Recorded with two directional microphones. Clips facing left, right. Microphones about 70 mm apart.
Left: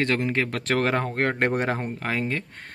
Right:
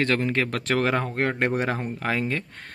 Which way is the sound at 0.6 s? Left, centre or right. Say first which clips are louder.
Left 1 dB; left.